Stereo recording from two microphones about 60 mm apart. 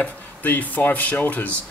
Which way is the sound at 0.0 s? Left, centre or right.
Left.